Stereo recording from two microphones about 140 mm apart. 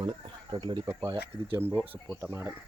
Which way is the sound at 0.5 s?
35° right (ahead or behind).